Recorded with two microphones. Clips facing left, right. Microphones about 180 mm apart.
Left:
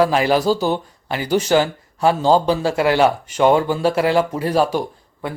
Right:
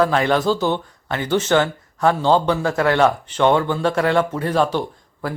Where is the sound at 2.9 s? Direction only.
5° left (ahead or behind).